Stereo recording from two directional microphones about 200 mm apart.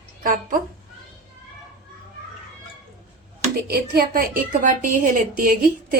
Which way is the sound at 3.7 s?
50° right (ahead or behind).